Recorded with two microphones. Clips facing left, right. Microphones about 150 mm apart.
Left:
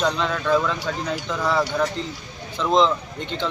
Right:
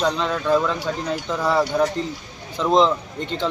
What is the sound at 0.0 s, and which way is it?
Speech, 5° right (ahead or behind).